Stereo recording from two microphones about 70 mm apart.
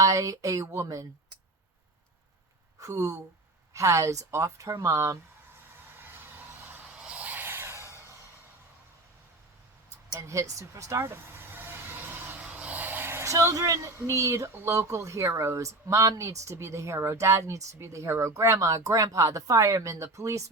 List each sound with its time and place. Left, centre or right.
0.0 s speech: right
2.8 s speech: right
6.0 s vehicle: right
6.9 s a sound: centre; by 7.9 s right
10.1 s speech: right
11.0 s vehicle: right
12.4 s speech: centre; by 20.4 s right